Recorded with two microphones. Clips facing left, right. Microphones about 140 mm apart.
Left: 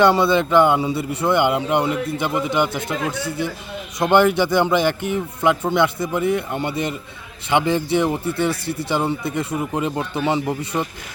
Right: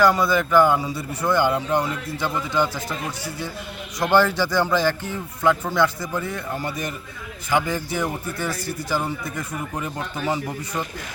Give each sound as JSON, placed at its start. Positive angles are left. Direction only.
{"t": 0.0, "sound": "a man's voice", "side_deg": 25}
{"t": 3.0, "sound": "speech", "side_deg": 60}
{"t": 4.0, "sound": "a man's voice", "side_deg": 20}